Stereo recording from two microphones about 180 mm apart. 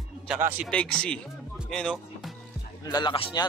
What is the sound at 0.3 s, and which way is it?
Speech, 5° right (ahead or behind).